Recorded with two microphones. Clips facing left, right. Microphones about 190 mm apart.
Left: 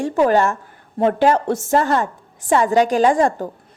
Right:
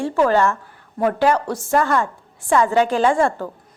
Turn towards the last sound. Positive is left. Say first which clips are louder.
# left 2 dB
turn(degrees=15)  # may be behind; listen again after turning